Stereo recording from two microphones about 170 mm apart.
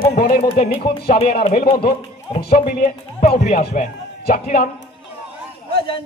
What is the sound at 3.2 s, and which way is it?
Speech, 45° left (ahead or behind).